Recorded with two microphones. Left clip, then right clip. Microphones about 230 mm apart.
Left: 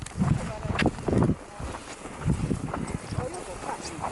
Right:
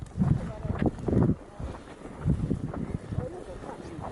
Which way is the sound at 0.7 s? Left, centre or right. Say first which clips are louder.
Left 3 dB; centre.